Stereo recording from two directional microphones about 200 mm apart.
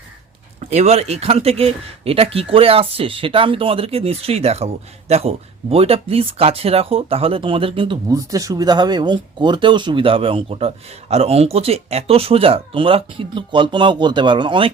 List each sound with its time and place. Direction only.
0.6 s speech: 35° right (ahead or behind)
8.0 s speech: 15° right (ahead or behind)